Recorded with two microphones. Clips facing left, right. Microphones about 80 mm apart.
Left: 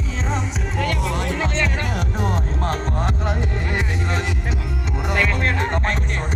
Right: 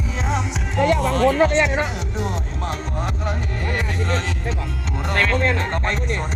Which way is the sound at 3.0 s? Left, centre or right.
Left.